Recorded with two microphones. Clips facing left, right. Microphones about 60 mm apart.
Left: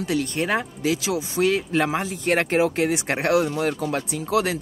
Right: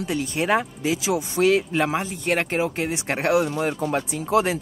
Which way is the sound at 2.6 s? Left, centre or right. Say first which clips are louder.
Left 4 dB; centre.